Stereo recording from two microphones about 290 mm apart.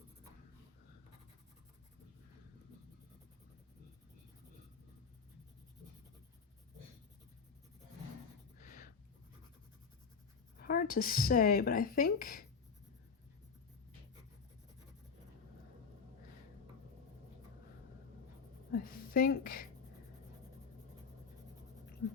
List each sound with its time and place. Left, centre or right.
8.5 s writing: left
10.6 s speech: left
18.7 s a sound: left